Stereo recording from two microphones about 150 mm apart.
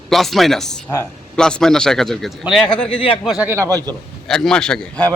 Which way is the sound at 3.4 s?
15° right (ahead or behind).